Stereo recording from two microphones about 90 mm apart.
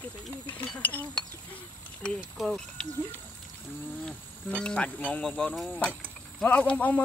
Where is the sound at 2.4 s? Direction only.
10° left (ahead or behind).